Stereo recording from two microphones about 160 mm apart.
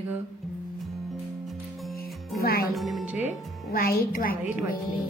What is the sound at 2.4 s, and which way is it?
Speech, 70° left (ahead or behind).